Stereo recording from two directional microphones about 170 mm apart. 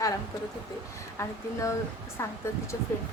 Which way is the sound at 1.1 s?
20° left (ahead or behind).